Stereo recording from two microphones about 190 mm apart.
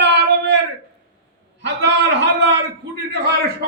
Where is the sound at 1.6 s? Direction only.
65° right (ahead or behind).